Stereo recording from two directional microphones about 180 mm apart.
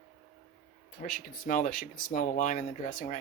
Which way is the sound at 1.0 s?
45° left (ahead or behind).